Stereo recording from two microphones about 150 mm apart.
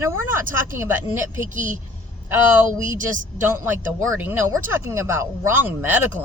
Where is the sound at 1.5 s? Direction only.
60° right (ahead or behind).